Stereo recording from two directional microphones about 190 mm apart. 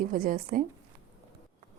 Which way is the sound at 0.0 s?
50° right (ahead or behind).